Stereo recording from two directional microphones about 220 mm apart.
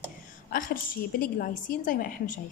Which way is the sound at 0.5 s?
40° left (ahead or behind).